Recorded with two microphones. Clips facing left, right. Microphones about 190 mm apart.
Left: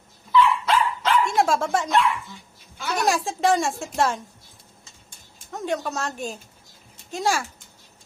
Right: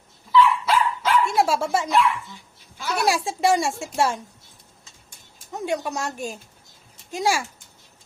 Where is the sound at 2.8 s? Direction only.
5° right (ahead or behind).